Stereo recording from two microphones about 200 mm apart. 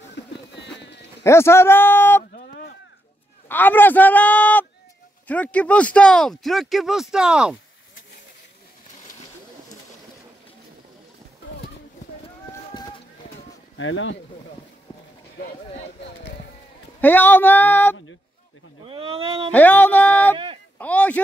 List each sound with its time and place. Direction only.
0.1 s a sound: 60° left (ahead or behind)
1.2 s a man's voice: 15° left (ahead or behind)
2.3 s a sound: 45° left (ahead or behind)
3.4 s a man's voice: 10° left (ahead or behind)
12.7 s run: 20° left (ahead or behind)
13.7 s speech: 70° left (ahead or behind)
17.0 s a man's voice: 10° left (ahead or behind)
18.9 s speech: 25° right (ahead or behind)
19.5 s a man's voice: 10° left (ahead or behind)
20.3 s speech: 25° right (ahead or behind)
20.7 s speech: 5° left (ahead or behind)